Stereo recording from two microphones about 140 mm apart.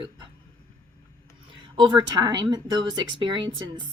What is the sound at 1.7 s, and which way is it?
Speech, 35° right (ahead or behind).